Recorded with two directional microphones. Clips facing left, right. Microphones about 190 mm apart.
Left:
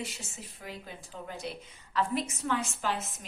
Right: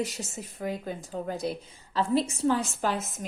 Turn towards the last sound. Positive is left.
turn(degrees=-45)  # may be behind; listen again after turning